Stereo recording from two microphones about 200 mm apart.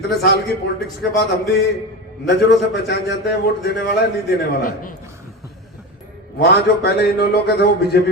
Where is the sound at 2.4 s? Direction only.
60° left (ahead or behind).